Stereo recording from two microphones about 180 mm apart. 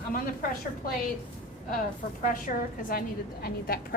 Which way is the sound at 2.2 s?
50° left (ahead or behind).